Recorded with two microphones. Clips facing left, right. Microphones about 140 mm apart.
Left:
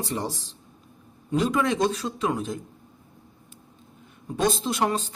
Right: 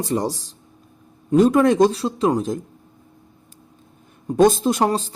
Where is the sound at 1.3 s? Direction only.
45° right (ahead or behind).